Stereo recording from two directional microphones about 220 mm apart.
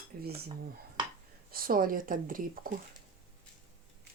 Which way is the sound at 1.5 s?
40° right (ahead or behind).